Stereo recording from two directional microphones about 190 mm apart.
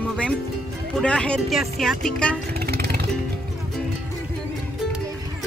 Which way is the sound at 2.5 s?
55° right (ahead or behind).